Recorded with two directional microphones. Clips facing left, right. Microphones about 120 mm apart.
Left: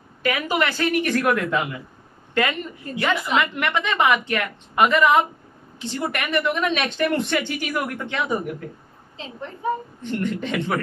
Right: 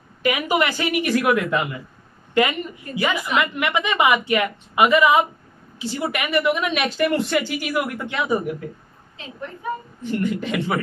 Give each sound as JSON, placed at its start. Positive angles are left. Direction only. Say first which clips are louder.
{"t": 0.2, "sound": "a woman's voice", "louder": "right 2 dB", "side_deg": -15}
{"t": 3.0, "sound": "a woman's voice", "louder": "even", "side_deg": -5}
{"t": 9.2, "sound": "a woman's voice", "louder": "left 1 dB", "side_deg": 25}
{"t": 10.0, "sound": "a woman's voice", "louder": "right 2 dB", "side_deg": -5}